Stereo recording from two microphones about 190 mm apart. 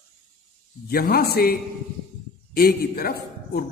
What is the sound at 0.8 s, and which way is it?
A man's voice, 50° left (ahead or behind).